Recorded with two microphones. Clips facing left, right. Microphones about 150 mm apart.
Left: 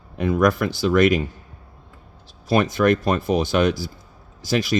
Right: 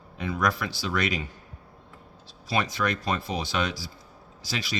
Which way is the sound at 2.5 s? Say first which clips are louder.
Left 10 dB; 50° left (ahead or behind).